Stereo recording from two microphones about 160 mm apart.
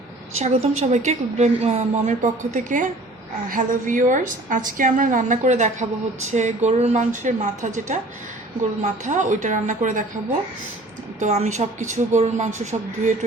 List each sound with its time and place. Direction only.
0.3 s a woman's voice: 45° right (ahead or behind)
11.2 s a woman's voice: 45° right (ahead or behind)